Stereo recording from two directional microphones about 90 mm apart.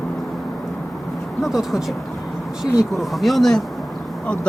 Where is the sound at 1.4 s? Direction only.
Centre (ahead or behind).